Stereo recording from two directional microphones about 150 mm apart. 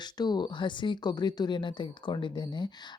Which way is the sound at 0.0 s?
30° left (ahead or behind).